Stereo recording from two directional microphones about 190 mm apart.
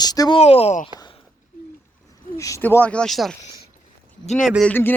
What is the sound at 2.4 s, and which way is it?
Speech, 15° left (ahead or behind).